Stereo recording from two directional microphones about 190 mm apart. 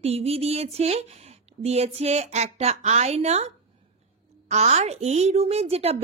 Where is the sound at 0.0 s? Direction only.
30° right (ahead or behind).